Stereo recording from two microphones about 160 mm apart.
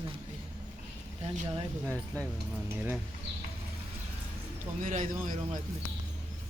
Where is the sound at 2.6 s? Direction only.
10° right (ahead or behind).